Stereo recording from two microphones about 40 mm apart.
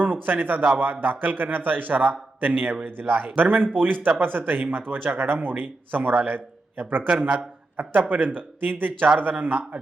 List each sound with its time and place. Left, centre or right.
0.0 s speech: right
7.1 s speech: right
7.8 s speech: right